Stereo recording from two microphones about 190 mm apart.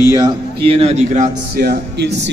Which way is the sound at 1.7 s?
65° right (ahead or behind).